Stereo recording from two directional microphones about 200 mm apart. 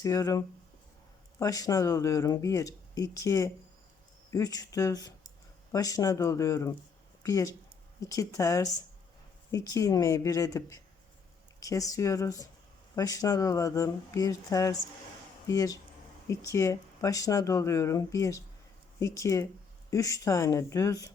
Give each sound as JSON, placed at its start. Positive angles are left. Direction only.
{"t": 0.0, "sound": "speech", "side_deg": 15}